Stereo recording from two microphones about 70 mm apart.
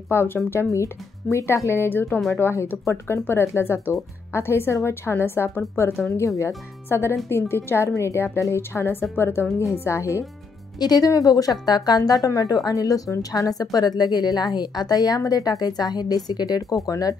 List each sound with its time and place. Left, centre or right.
0.1 s speech: left
10.8 s speech: left
11.6 s a woman's voice: left
12.3 s a woman's voice: left